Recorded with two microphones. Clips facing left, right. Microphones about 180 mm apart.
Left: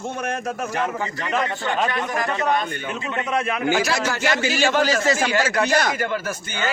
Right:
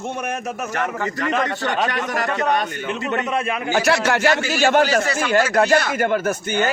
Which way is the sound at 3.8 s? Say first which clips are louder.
Right 4 dB; 65° right (ahead or behind).